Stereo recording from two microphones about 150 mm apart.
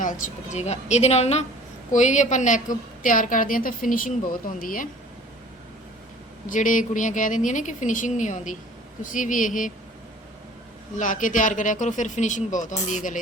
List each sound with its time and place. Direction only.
0.0 s a woman's voice: 55° left (ahead or behind)
6.5 s a woman's voice: 60° left (ahead or behind)
10.9 s a woman's voice: 60° left (ahead or behind)